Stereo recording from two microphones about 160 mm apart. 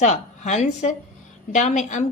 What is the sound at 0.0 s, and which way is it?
A woman's voice, 45° left (ahead or behind).